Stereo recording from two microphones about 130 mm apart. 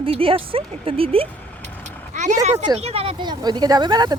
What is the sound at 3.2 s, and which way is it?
Speech, 35° right (ahead or behind).